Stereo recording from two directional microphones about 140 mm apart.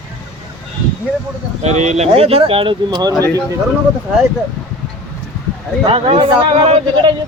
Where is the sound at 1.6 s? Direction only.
55° right (ahead or behind); by 3.2 s 30° right (ahead or behind).